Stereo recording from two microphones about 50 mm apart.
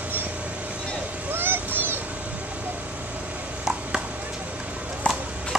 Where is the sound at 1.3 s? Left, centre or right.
Right.